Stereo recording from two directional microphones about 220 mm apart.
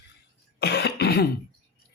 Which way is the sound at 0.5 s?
45° left (ahead or behind).